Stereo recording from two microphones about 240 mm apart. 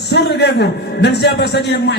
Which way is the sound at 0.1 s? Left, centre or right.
Left.